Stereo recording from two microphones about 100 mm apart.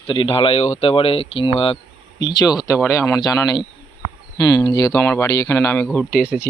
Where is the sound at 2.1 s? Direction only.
45° left (ahead or behind).